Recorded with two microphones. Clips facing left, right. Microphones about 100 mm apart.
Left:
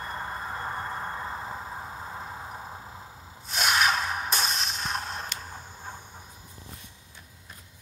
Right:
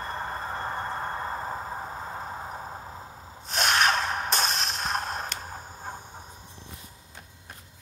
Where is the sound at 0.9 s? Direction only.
30° right (ahead or behind).